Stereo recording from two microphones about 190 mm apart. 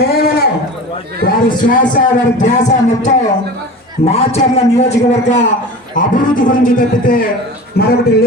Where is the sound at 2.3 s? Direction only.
40° left (ahead or behind).